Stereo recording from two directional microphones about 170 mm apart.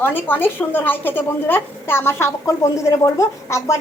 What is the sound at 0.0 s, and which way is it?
A woman's voice, 10° left (ahead or behind).